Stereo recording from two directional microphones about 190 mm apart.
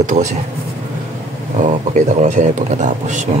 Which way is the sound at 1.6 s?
35° right (ahead or behind).